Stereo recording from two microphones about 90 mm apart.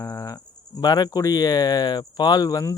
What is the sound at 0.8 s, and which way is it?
Speech, 45° left (ahead or behind).